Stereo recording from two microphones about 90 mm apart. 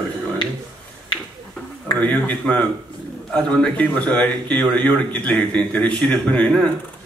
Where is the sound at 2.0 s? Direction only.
15° left (ahead or behind).